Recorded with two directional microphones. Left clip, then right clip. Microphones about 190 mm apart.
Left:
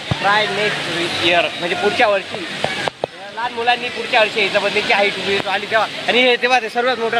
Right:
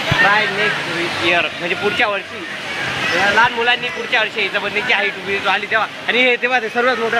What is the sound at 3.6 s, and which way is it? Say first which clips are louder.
Speech: right 1 dB; centre (ahead or behind).